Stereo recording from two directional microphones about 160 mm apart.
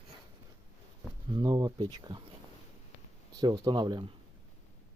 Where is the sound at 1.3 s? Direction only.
30° right (ahead or behind).